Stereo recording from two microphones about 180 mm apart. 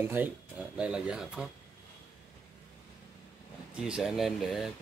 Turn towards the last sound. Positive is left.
turn(degrees=0)  # may be behind; listen again after turning